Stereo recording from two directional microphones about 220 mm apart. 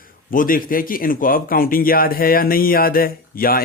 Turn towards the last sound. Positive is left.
turn(degrees=40)  # may be behind; listen again after turning